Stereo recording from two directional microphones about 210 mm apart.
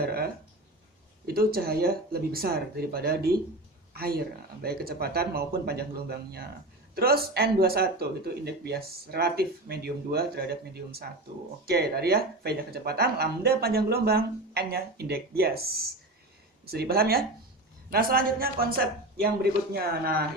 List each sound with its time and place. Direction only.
0.0 s speech: 45° right (ahead or behind)
1.3 s speech: 45° right (ahead or behind)
11.6 s speech: 50° right (ahead or behind)
16.6 s speech: 45° right (ahead or behind)